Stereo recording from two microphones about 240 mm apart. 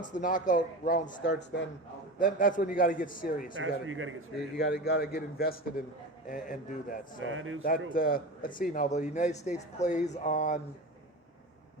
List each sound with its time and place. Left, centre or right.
0.0 s a man's voice: left
3.6 s speech: right
4.5 s a man's voice: left
7.2 s speech: right
7.9 s a man's voice: left